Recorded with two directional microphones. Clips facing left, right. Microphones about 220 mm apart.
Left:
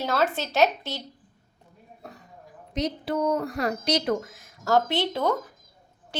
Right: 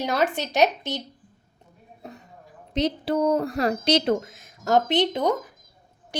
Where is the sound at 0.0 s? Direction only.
15° right (ahead or behind).